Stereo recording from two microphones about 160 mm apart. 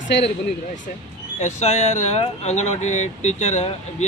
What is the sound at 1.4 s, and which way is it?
Speech, 45° left (ahead or behind).